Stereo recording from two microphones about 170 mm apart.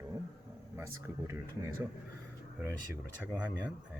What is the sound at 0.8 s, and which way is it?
Speech, 15° right (ahead or behind).